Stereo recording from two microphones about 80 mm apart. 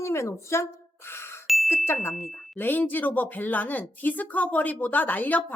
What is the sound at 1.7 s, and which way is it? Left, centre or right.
Speech, left.